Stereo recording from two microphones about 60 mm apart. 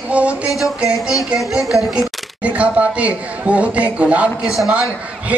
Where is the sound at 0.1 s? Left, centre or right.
Right.